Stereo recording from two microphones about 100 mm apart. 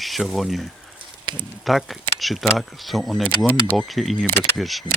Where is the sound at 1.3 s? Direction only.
55° right (ahead or behind).